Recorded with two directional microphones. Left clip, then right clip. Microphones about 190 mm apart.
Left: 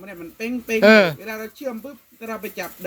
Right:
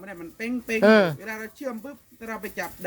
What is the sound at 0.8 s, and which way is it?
Speech, 20° right (ahead or behind).